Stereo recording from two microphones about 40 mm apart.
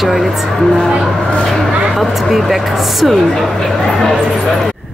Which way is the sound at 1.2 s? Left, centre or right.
Centre.